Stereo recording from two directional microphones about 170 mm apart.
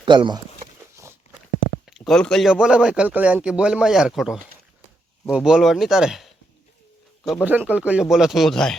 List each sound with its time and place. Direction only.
0.0 s speech: 30° right (ahead or behind)
1.9 s a man's voice: 5° left (ahead or behind)
7.4 s a man's voice: 10° right (ahead or behind)